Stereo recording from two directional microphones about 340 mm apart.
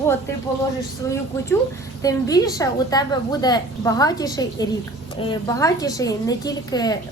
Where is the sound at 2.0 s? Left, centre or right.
Centre.